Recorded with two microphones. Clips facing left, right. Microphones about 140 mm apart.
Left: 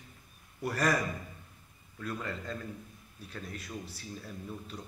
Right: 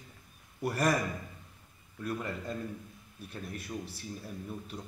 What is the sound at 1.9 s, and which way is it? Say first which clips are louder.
Speech: right 2 dB; 15° right (ahead or behind).